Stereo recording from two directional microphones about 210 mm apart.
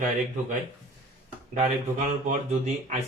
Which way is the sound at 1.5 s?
35° right (ahead or behind).